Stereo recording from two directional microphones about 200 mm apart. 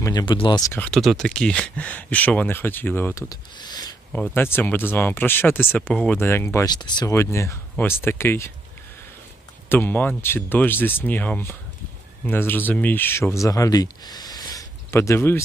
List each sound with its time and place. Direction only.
0.0 s speech: 20° left (ahead or behind)
0.9 s speech: centre (ahead or behind); by 3.9 s 20° left (ahead or behind)
4.1 s speech: 10° left (ahead or behind)
9.6 s speech: 10° left (ahead or behind)